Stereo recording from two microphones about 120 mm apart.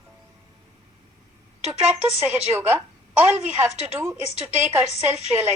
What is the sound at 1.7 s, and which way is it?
A woman's voice, 10° right (ahead or behind).